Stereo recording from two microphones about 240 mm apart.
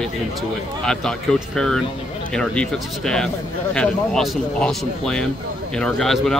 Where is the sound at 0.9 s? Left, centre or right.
Centre.